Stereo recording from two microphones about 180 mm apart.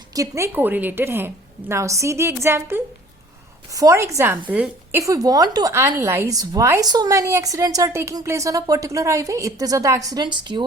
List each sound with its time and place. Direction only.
0.1 s a woman's voice: 15° right (ahead or behind)